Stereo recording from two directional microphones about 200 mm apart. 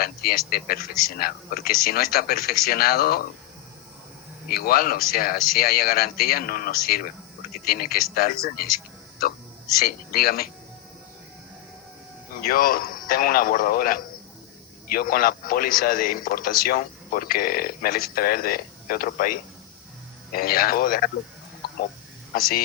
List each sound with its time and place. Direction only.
0.0 s a man's voice: 50° left (ahead or behind)
4.4 s a man's voice: 50° left (ahead or behind)
12.3 s a man's voice: 45° left (ahead or behind)
22.4 s a man's voice: 50° left (ahead or behind)